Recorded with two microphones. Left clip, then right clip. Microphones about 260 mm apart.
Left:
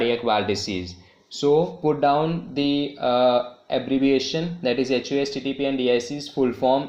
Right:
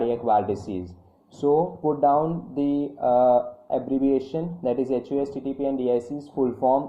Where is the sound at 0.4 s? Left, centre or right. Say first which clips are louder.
Left 3 dB; centre.